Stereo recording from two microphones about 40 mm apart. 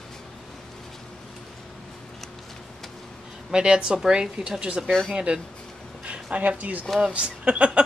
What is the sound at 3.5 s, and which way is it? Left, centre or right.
A woman's voice, right.